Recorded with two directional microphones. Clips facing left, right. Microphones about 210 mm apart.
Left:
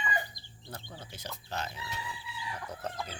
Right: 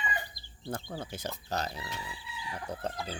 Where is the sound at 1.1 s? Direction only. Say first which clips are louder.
Right 3 dB; 45° right (ahead or behind); by 3.2 s 30° right (ahead or behind).